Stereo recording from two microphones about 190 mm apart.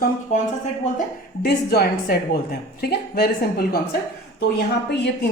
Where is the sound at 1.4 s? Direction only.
55° left (ahead or behind).